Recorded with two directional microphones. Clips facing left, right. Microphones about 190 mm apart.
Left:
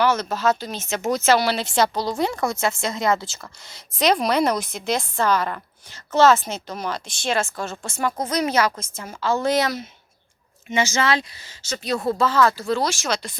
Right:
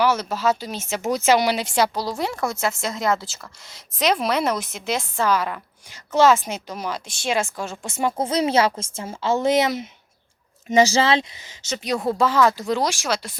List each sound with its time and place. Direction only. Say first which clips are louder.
0.0 s speech: even; 10° right (ahead or behind)
7.9 s a woman's voice: right 2 dB; 25° right (ahead or behind)
10.7 s speech: right 4 dB; 35° right (ahead or behind); by 13.3 s 5° right (ahead or behind)